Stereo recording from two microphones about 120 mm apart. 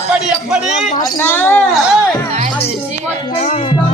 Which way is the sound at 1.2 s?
20° left (ahead or behind).